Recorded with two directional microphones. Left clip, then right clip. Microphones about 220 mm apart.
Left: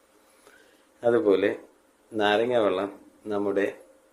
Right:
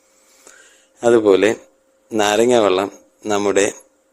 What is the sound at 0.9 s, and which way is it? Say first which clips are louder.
Speech: right 9 dB; 35° right (ahead or behind).